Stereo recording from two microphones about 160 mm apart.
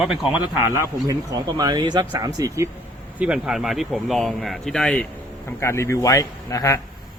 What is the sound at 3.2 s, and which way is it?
Speech, 5° right (ahead or behind).